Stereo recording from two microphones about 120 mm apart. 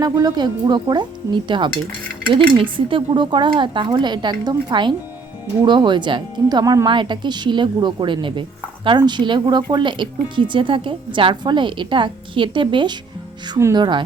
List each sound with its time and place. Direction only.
0.0 s speech: 30° right (ahead or behind)